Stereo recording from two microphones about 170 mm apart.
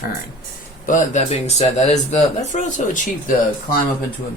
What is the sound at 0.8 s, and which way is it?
Speech, 45° left (ahead or behind).